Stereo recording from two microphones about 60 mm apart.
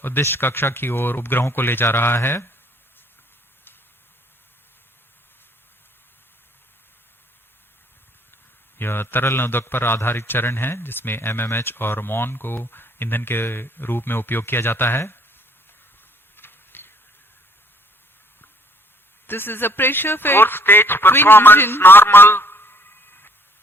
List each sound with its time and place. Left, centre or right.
0.2 s a man's voice: left
8.8 s a man's voice: left
16.4 s a sound: left
19.3 s a man's voice: left